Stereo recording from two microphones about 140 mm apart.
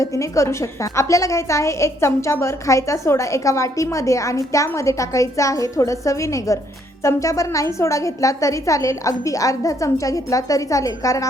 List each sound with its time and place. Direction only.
0.0 s a woman's voice: 20° left (ahead or behind)